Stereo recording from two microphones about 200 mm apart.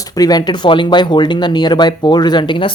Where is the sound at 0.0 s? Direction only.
20° left (ahead or behind).